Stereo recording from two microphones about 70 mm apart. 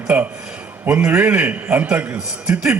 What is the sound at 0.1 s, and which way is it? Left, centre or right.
A man's voice, right.